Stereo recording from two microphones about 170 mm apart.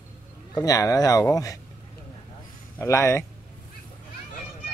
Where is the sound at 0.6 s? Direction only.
20° left (ahead or behind).